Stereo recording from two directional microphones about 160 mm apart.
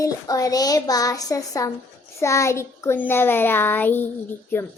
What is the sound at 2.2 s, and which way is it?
Child singing, 20° left (ahead or behind).